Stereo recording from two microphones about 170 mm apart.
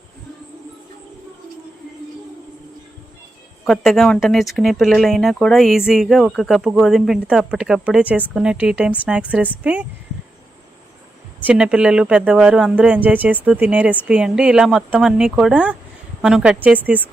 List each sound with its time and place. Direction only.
3.7 s speech: centre (ahead or behind)
11.4 s speech: 5° right (ahead or behind)